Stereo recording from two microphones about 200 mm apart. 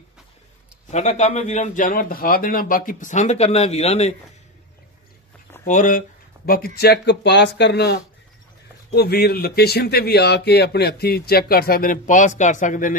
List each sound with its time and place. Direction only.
0.8 s a man's voice: 35° left (ahead or behind)
5.7 s speech: 40° left (ahead or behind)